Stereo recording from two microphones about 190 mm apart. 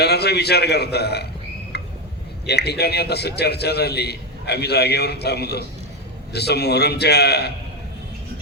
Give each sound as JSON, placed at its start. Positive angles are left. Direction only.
{"t": 0.0, "sound": "a man's voice", "side_deg": 60}
{"t": 1.7, "sound": "a sound", "side_deg": 60}
{"t": 2.5, "sound": "a man's voice", "side_deg": 60}